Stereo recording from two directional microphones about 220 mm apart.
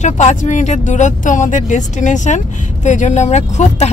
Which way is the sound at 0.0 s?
35° left (ahead or behind).